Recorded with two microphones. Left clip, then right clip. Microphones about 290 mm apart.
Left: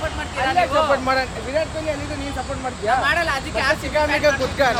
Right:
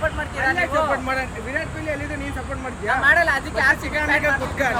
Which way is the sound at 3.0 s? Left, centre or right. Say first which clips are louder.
Right 3 dB; centre.